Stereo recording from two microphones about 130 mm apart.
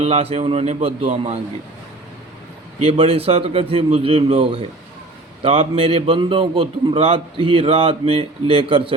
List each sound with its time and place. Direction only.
0.0 s a man's voice: 50° right (ahead or behind)
2.8 s a man's voice: 50° right (ahead or behind)